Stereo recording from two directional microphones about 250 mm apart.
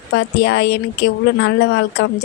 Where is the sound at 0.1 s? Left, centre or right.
Left.